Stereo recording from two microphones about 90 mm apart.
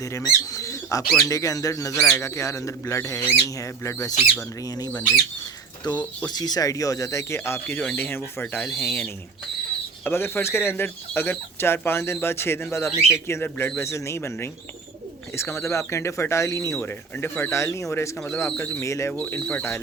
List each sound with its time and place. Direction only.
0.0 s speech: 40° left (ahead or behind)
5.8 s speech: 50° left (ahead or behind); by 18.3 s 30° left (ahead or behind)
18.5 s speech: 20° left (ahead or behind)
18.8 s speech: 35° left (ahead or behind)
19.1 s speech: 20° left (ahead or behind)